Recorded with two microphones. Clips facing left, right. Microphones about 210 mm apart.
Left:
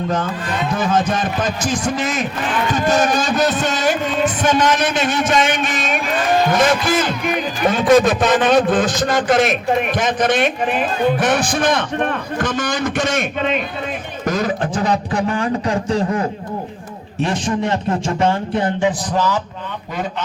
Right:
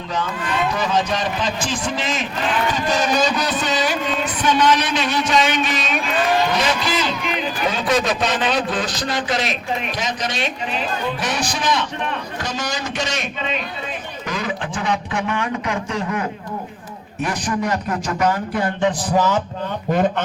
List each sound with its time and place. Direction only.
0.7 s a man's voice: 50° left (ahead or behind); by 18.7 s 25° left (ahead or behind)
19.1 s speech: 20° right (ahead or behind)
19.9 s speech: 50° right (ahead or behind)